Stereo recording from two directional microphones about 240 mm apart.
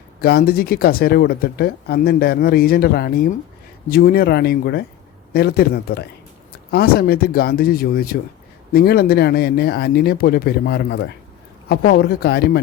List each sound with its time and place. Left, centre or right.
0.2 s speech: left